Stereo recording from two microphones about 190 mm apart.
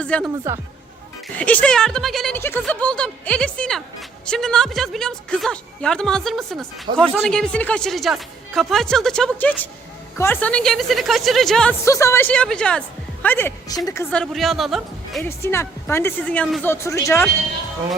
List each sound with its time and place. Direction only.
0.0 s speech: 5° left (ahead or behind)
1.4 s speech: 5° left (ahead or behind)
11.9 s a woman's voice: 15° left (ahead or behind)
14.1 s speech: centre (ahead or behind)
15.2 s speech: 15° left (ahead or behind)